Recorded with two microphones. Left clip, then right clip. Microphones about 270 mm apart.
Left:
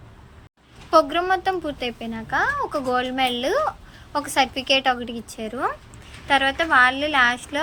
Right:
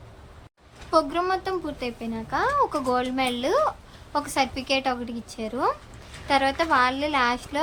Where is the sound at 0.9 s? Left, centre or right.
Centre.